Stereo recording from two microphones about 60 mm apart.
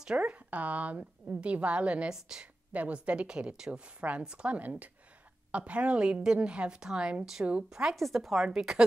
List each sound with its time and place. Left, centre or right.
0.0 s a woman's voice: centre
2.1 s a woman's voice: centre
2.7 s a woman's voice: right
7.8 s speech: centre